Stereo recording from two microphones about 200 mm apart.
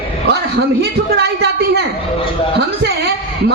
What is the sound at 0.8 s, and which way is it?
A woman's voice, 55° right (ahead or behind).